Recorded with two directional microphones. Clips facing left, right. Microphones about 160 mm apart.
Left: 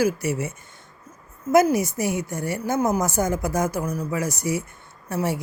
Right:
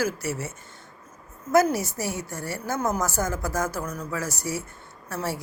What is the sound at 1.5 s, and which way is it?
Speech, 15° left (ahead or behind).